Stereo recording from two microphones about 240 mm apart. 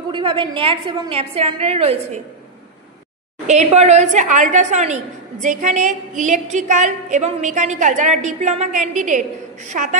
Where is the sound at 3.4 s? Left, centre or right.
Right.